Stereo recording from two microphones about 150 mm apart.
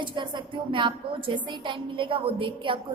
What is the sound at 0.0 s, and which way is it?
A woman's voice, 30° right (ahead or behind).